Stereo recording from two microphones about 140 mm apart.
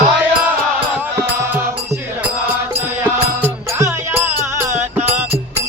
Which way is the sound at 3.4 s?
15° right (ahead or behind).